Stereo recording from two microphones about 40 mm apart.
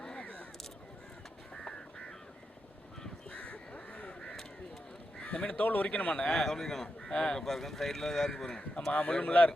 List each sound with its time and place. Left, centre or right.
0.2 s crow: left
1.5 s caw: centre
3.3 s crow: left
4.2 s caw: centre
5.2 s speech: left
5.6 s speech: left
5.9 s a man's voice: left
6.2 s speech: centre
8.9 s a man's voice: left